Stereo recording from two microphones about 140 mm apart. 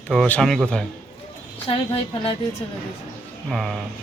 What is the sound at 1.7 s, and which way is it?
Speech, 45° left (ahead or behind).